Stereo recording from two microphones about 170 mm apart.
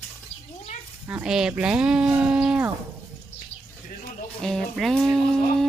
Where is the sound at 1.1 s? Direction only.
5° right (ahead or behind).